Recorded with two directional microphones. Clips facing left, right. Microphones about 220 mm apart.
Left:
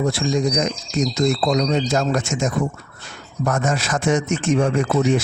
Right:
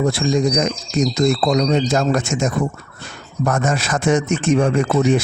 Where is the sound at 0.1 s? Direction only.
55° right (ahead or behind).